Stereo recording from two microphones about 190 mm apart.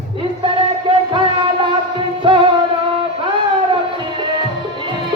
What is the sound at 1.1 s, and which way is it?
Music, 25° right (ahead or behind).